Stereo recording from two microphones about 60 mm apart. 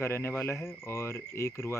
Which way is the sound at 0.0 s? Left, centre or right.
Left.